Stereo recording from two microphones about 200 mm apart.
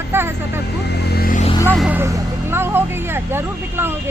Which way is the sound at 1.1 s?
45° left (ahead or behind).